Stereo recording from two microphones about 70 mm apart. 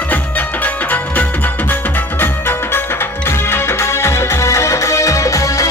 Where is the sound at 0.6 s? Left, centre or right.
Left.